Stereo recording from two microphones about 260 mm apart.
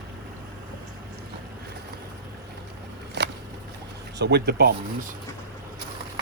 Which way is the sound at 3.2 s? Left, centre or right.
Right.